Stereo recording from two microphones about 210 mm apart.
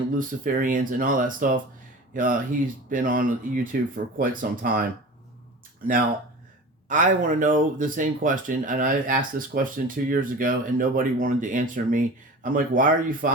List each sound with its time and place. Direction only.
0.2 s speech: 40° right (ahead or behind)
6.8 s speech: 40° right (ahead or behind)